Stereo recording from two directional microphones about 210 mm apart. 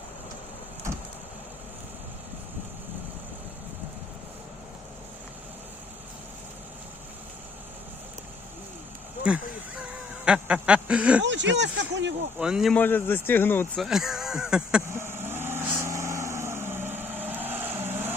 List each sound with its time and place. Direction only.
10.2 s a sound: 5° right (ahead or behind)
11.2 s speech: 60° right (ahead or behind)
12.4 s speech: 5° right (ahead or behind)
13.8 s vehicle: centre (ahead or behind)